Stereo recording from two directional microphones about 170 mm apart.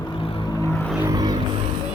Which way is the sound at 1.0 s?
20° right (ahead or behind).